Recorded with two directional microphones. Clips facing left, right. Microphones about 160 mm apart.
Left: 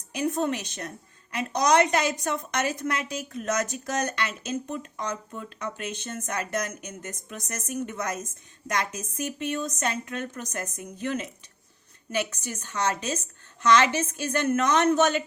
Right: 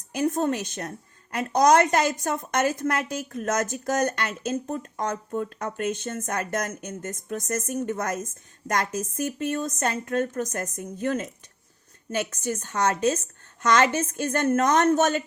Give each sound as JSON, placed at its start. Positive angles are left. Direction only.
{"t": 0.1, "sound": "a woman's voice", "side_deg": -50}